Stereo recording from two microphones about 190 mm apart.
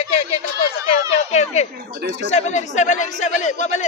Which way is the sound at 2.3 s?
35° left (ahead or behind).